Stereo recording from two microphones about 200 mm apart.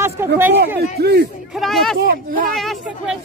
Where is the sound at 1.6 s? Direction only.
Centre (ahead or behind).